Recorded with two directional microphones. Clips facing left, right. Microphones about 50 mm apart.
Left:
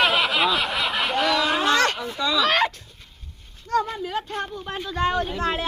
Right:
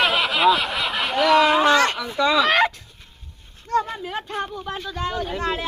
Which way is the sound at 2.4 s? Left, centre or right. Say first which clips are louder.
Right 2 dB; centre.